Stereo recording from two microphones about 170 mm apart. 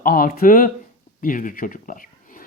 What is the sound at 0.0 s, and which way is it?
Speech, 60° left (ahead or behind).